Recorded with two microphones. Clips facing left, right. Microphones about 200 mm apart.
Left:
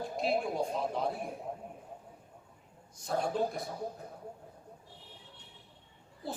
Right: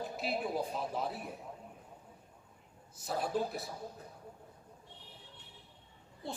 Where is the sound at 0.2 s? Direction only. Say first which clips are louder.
Left 5 dB; 5° right (ahead or behind).